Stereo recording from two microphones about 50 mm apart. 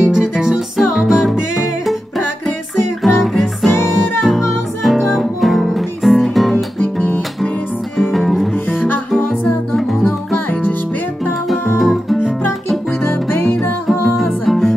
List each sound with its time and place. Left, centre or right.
0.0 s music: centre
8.1 s music: centre
8.6 s music: left
11.8 s guitar: centre
13.0 s music: left
14.0 s music: centre